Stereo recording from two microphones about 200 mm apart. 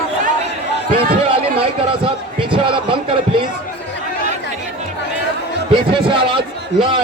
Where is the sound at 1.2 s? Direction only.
25° right (ahead or behind).